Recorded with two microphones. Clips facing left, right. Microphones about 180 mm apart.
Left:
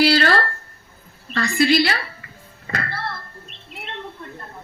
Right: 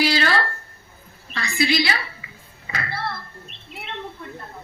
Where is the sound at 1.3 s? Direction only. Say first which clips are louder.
Left 5 dB; 50° left (ahead or behind).